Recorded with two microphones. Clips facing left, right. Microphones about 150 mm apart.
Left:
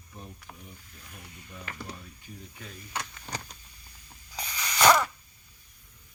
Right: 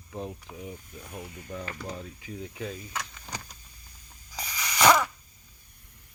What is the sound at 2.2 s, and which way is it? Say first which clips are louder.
Speech: right 9 dB; 80° right.